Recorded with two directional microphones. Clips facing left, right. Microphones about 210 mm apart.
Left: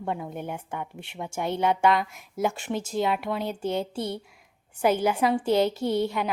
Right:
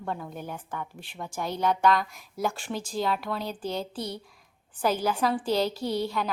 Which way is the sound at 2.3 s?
20° left (ahead or behind).